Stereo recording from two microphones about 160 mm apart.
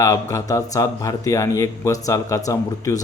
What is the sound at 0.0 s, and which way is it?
A man's voice, 20° left (ahead or behind).